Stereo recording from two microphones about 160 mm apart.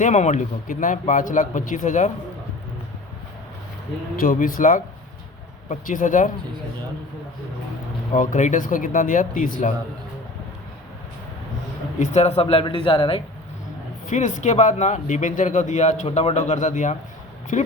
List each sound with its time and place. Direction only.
0.0 s speech: 50° left (ahead or behind)
4.2 s speech: 60° left (ahead or behind)
8.1 s speech: 50° left (ahead or behind)
11.9 s speech: 45° left (ahead or behind)
14.1 s speech: 50° left (ahead or behind)